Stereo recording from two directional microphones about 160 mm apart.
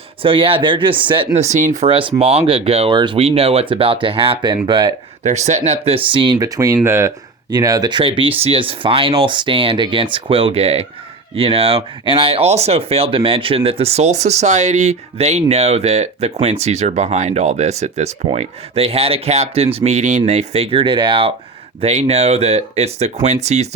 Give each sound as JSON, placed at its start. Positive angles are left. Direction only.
{"t": 0.2, "sound": "speech", "side_deg": -35}
{"t": 1.3, "sound": "speech", "side_deg": -45}
{"t": 5.2, "sound": "speech", "side_deg": -45}